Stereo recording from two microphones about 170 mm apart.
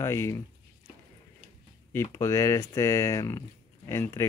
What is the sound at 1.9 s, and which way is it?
Speech, 15° left (ahead or behind).